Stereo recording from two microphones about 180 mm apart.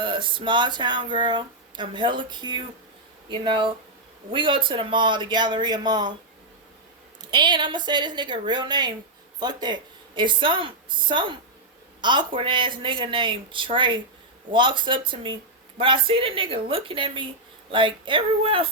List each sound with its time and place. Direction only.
0.0 s speech: 25° right (ahead or behind)
7.2 s speech: 25° right (ahead or behind)